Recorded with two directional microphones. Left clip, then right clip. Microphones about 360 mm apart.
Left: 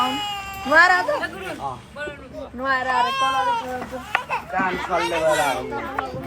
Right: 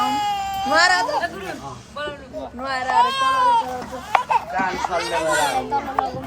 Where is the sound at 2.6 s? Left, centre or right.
Left.